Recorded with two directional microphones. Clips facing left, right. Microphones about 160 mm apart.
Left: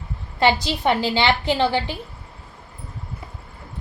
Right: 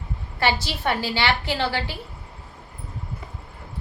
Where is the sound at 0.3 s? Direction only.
20° left (ahead or behind).